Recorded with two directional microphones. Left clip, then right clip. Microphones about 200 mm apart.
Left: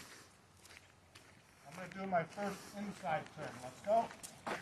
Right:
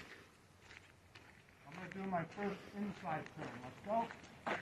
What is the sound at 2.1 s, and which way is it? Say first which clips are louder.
Speech: left 4 dB; 15° left (ahead or behind).